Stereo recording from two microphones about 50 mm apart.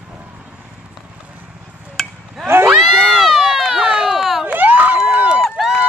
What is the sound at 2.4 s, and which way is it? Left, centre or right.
Run, right.